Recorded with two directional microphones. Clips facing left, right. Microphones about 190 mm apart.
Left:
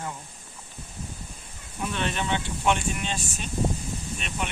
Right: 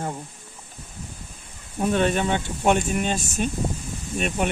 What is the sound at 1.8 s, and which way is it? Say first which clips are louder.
Speech: right 8 dB; 45° right (ahead or behind).